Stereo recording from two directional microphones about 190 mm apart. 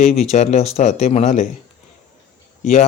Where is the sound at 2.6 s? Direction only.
35° left (ahead or behind).